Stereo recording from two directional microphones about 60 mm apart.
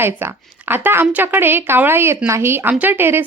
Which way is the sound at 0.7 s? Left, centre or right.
Right.